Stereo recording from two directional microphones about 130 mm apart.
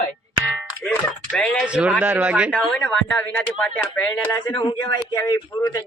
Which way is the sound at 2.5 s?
5° left (ahead or behind).